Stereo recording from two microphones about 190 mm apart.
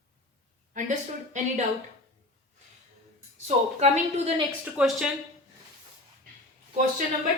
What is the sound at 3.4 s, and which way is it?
A woman's voice, 35° right (ahead or behind).